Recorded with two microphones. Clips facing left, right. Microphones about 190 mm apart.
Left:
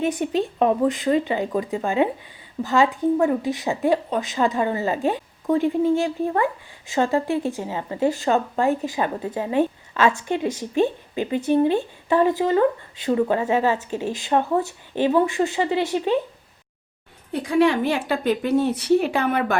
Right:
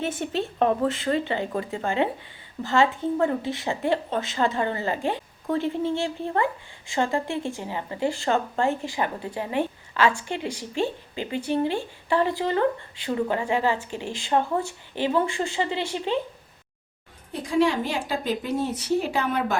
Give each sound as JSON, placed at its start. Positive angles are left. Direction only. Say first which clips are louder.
{"t": 0.0, "sound": "a woman's voice", "louder": "left 5 dB", "side_deg": 15}
{"t": 17.4, "sound": "a woman's voice", "louder": "left 4 dB", "side_deg": 65}